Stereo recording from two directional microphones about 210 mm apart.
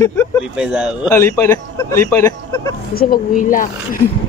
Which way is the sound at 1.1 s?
10° left (ahead or behind).